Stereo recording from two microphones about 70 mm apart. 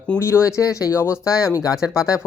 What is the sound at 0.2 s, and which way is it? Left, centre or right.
Speech, left.